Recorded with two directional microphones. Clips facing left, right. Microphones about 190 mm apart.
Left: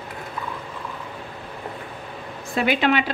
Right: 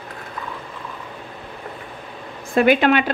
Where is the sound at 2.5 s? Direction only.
50° right (ahead or behind).